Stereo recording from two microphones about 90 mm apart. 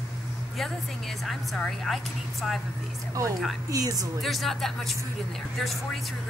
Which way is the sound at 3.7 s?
45° right (ahead or behind).